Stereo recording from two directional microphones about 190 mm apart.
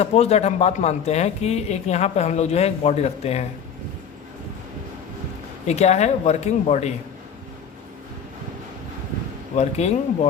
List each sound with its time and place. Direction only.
0.0 s speech: 35° left (ahead or behind)
5.6 s speech: 35° left (ahead or behind)
9.6 s speech: 35° left (ahead or behind)